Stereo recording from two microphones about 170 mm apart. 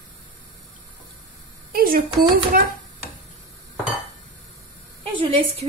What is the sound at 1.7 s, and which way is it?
Speech, 60° right (ahead or behind).